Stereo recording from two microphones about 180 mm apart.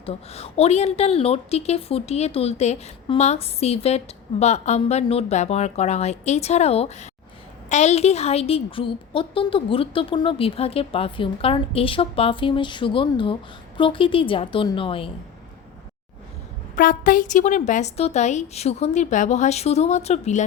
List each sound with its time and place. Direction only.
0.0 s a woman's voice: 35° left (ahead or behind)
16.7 s a woman's voice: 50° left (ahead or behind)